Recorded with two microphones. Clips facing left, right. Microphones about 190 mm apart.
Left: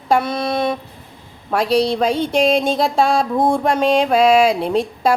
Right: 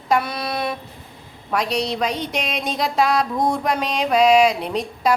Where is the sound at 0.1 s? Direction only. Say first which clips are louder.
Left 4 dB; 25° left (ahead or behind).